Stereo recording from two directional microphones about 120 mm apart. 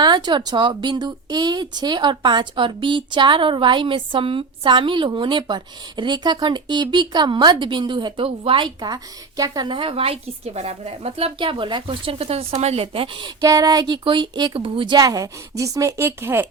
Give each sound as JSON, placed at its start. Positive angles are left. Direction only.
{"t": 0.0, "sound": "a woman's voice", "side_deg": -35}
{"t": 13.4, "sound": "a woman's voice", "side_deg": -30}